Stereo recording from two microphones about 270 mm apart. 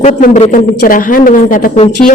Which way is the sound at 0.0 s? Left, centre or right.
Left.